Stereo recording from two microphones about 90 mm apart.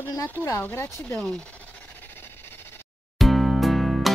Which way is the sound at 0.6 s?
25° left (ahead or behind).